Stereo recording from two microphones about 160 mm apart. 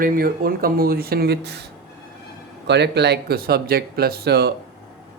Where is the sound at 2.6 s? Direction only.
90° right.